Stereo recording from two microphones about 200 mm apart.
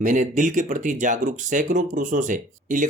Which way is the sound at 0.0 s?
40° right (ahead or behind).